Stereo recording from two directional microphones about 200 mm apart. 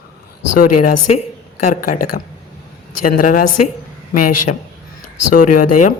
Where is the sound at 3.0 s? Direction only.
45° left (ahead or behind).